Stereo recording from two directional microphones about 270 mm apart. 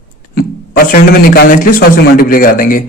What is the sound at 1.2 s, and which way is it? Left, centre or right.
Speech, left.